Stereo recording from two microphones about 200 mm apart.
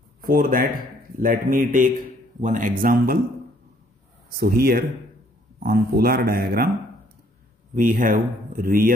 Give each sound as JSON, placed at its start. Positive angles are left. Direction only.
{"t": 0.2, "sound": "a man's voice", "side_deg": -45}
{"t": 4.4, "sound": "speech", "side_deg": -50}
{"t": 7.7, "sound": "speech", "side_deg": -40}